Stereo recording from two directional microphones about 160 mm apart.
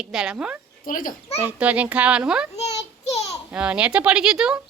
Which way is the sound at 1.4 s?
10° right (ahead or behind).